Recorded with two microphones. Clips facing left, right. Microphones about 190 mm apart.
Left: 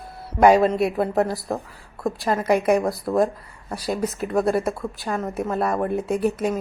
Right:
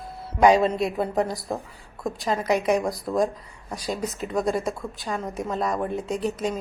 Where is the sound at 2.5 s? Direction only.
50° left (ahead or behind).